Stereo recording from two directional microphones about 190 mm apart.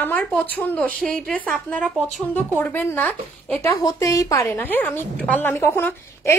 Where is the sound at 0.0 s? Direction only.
10° left (ahead or behind).